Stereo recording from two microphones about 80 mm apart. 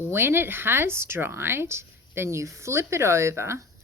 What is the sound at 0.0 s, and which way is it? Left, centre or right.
Speech, right.